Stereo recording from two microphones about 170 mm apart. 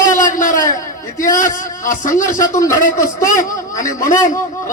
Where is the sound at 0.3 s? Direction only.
50° left (ahead or behind).